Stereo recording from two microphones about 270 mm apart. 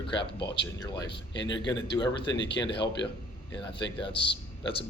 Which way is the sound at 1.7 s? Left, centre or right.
Centre.